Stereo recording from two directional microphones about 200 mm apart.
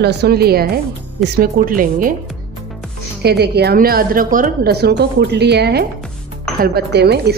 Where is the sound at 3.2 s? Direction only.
55° right (ahead or behind).